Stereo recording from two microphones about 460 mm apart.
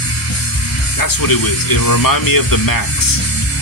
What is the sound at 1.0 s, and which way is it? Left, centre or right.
Speech, left.